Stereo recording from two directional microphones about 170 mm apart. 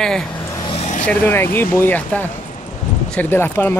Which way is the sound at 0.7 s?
45° left (ahead or behind).